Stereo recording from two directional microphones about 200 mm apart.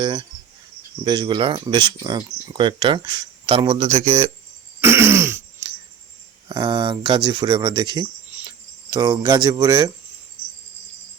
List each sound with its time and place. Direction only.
0.0 s speech: 25° right (ahead or behind)
4.8 s throat clearing: 10° right (ahead or behind)
6.5 s speech: 25° right (ahead or behind)